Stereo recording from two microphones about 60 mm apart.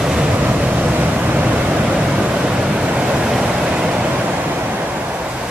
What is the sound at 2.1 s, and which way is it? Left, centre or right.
Vehicle, centre.